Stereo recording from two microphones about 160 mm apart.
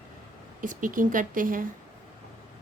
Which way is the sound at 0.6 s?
55° right (ahead or behind).